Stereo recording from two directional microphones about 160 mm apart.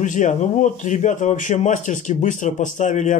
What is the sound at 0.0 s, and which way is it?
Speech, 50° left (ahead or behind).